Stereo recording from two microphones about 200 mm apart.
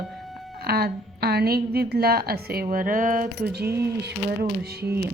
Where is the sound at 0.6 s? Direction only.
50° right (ahead or behind).